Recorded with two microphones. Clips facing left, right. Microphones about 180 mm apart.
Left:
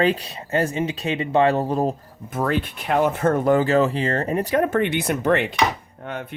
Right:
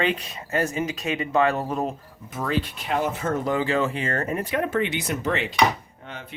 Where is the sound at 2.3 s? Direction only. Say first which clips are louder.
Left 4 dB; 55° left (ahead or behind).